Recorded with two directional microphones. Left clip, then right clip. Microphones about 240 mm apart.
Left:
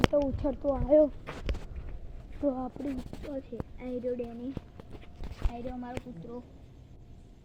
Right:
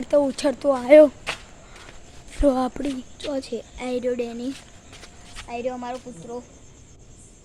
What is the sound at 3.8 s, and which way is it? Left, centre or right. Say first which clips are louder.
Speech: right 9 dB; right.